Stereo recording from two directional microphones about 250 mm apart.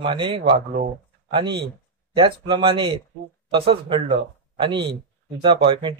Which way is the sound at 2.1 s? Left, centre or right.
Centre.